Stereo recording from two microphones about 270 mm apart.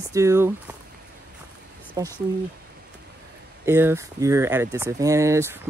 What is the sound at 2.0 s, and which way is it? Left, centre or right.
Speech, centre.